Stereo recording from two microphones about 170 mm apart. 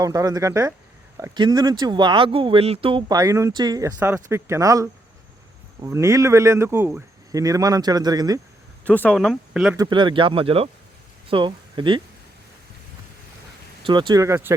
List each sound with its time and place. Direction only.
0.0 s speech: 20° right (ahead or behind)
8.9 s speech: 5° left (ahead or behind)
9.7 s speech: 25° right (ahead or behind)
13.8 s speech: 25° right (ahead or behind)